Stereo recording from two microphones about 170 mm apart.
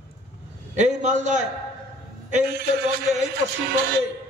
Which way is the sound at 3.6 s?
70° right (ahead or behind).